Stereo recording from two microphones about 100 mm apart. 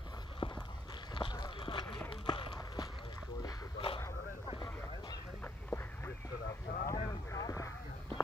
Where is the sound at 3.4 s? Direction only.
60° left (ahead or behind).